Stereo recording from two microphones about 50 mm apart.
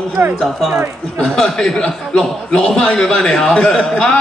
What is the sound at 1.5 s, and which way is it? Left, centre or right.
A man's voice, centre.